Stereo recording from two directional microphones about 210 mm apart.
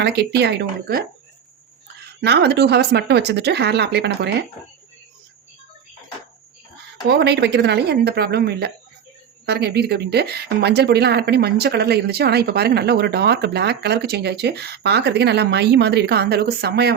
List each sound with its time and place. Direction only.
0.0 s speech: 50° right (ahead or behind)
2.2 s speech: 50° right (ahead or behind)
7.1 s speech: 50° right (ahead or behind)